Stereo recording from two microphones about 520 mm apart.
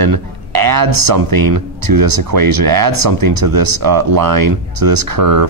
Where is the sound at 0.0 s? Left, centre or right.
Right.